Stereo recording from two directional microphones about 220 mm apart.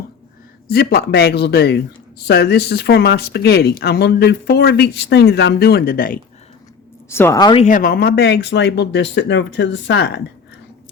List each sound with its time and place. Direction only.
0.7 s speech: 45° left (ahead or behind)
7.1 s speech: 10° left (ahead or behind)
7.6 s speech: 40° left (ahead or behind); by 10.2 s 55° left (ahead or behind)